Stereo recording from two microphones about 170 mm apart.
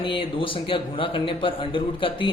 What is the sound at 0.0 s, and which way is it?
A man's voice, 30° left (ahead or behind).